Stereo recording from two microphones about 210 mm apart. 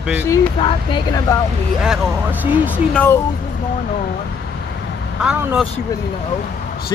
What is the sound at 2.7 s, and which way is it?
Speech, 10° left (ahead or behind).